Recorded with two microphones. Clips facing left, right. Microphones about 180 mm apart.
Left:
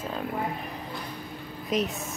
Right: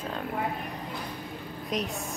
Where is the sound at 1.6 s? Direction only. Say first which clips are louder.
Left 4 dB; centre (ahead or behind).